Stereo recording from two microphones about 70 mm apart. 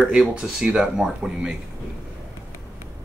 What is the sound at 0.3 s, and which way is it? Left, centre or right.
Speech, centre.